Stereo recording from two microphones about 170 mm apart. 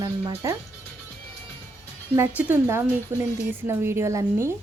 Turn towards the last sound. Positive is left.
turn(degrees=-15)  # may be behind; listen again after turning